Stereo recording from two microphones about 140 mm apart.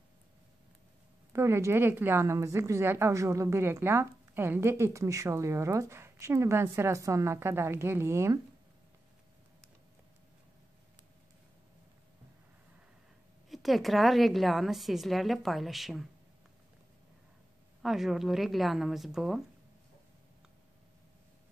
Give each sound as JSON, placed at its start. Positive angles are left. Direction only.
{"t": 1.3, "sound": "a woman's voice", "side_deg": -20}
{"t": 13.5, "sound": "a woman's voice", "side_deg": 0}
{"t": 17.8, "sound": "a woman's voice", "side_deg": 0}